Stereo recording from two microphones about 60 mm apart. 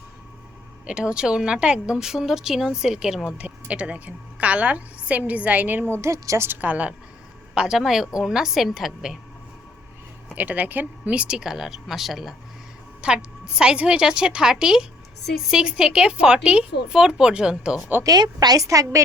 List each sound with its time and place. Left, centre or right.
0.9 s a woman's voice: centre
3.3 s a woman's voice: right
5.9 s a woman's voice: right
6.5 s a woman's voice: right
7.5 s a woman's voice: centre
10.3 s a woman's voice: right; by 12.3 s centre
13.0 s a woman's voice: centre
18.0 s a woman's voice: right